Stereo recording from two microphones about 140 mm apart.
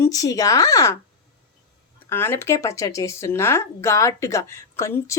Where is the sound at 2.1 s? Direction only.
15° left (ahead or behind).